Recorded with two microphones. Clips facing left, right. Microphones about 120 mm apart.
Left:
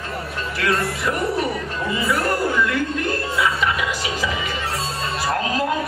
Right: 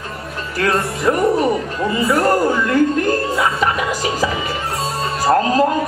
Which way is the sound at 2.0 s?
40° right (ahead or behind).